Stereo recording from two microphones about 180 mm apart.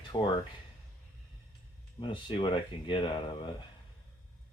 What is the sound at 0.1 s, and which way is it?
Speech, 25° left (ahead or behind).